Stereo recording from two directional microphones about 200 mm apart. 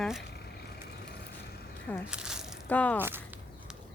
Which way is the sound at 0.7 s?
55° left (ahead or behind).